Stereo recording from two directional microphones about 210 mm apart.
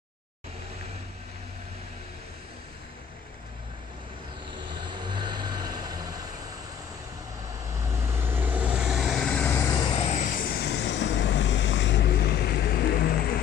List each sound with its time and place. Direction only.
4.8 s vehicle: 20° right (ahead or behind)
7.9 s vehicle: 10° right (ahead or behind)
9.8 s vehicle: 30° left (ahead or behind); by 13.2 s 50° left (ahead or behind)